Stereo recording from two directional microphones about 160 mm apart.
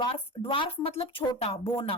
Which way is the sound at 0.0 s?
30° left (ahead or behind).